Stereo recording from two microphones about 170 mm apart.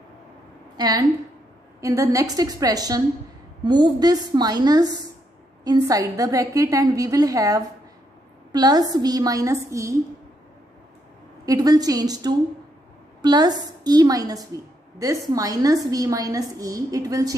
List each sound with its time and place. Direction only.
0.7 s a woman's voice: 20° right (ahead or behind)
11.4 s a woman's voice: 20° right (ahead or behind)